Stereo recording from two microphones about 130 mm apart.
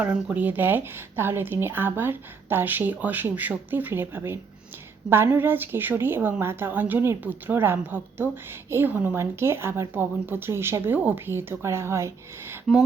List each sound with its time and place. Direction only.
0.0 s a woman's voice: 15° right (ahead or behind)